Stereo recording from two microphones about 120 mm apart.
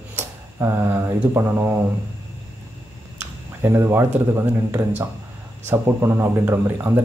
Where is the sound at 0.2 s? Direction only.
20° right (ahead or behind).